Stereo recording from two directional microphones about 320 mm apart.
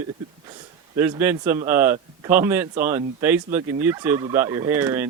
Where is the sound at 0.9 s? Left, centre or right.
Centre.